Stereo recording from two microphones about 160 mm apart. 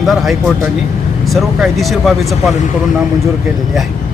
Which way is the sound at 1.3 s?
Centre (ahead or behind).